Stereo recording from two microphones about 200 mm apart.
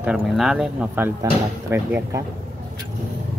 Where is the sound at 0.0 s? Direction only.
5° right (ahead or behind).